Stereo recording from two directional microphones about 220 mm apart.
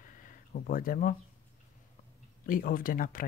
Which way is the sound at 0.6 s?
40° left (ahead or behind).